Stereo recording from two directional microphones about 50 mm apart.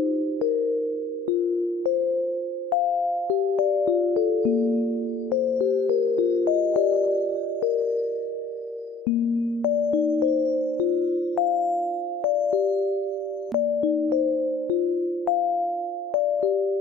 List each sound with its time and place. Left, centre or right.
4.6 s music: left
6.5 s music: left
10.0 s music: left
11.3 s music: centre